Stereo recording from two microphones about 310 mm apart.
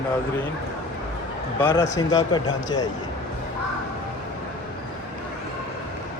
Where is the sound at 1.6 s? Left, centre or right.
Centre.